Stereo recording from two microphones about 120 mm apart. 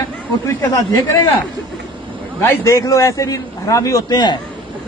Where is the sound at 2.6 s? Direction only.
25° left (ahead or behind).